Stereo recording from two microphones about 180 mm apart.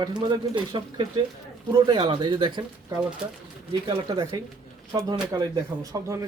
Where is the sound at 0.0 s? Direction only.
25° right (ahead or behind).